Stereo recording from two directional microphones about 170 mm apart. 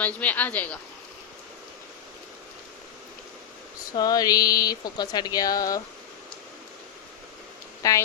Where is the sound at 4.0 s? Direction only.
20° left (ahead or behind).